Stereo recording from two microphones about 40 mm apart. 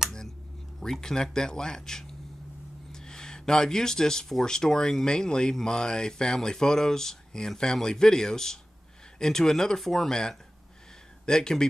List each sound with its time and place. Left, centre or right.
1.0 s speech: centre
2.9 s a sound: centre
4.3 s speech: centre
11.2 s speech: centre